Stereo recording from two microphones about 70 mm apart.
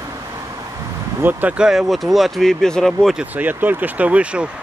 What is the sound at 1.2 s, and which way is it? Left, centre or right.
Speech, right.